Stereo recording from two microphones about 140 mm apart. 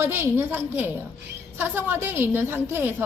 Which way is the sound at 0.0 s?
15° right (ahead or behind).